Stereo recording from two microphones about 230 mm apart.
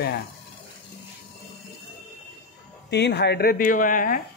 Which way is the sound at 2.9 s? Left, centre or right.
Left.